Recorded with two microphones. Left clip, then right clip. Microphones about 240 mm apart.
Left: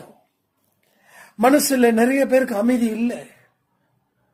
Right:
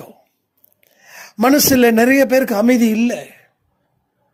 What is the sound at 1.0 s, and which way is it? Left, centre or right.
Speech, right.